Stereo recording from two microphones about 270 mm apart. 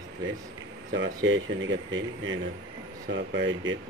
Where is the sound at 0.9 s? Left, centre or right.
Right.